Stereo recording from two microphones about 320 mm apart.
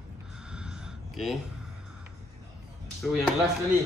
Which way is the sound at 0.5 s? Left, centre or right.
Centre.